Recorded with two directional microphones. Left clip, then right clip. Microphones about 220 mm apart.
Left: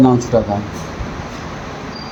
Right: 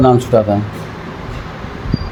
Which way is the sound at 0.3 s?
40° right (ahead or behind).